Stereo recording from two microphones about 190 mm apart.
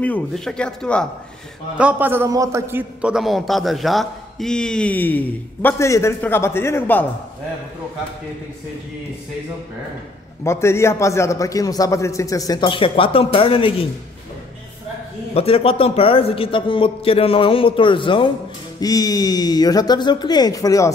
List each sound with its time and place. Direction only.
0.0 s a man's voice: 5° left (ahead or behind)
1.8 s a man's voice: 10° right (ahead or behind); by 7.1 s 10° left (ahead or behind)
10.4 s a man's voice: 15° left (ahead or behind)
15.3 s a man's voice: 30° left (ahead or behind)